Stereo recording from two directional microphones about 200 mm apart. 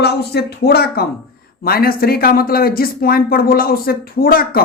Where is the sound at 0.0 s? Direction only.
55° left (ahead or behind).